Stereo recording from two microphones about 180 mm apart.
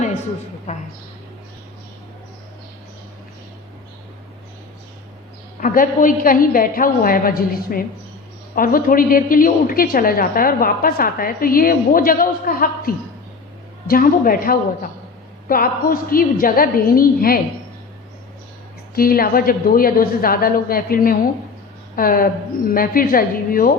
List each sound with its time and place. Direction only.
0.7 s a woman's voice: 40° left (ahead or behind)
5.5 s a woman's voice: 50° left (ahead or behind)
18.9 s a woman's voice: 55° left (ahead or behind)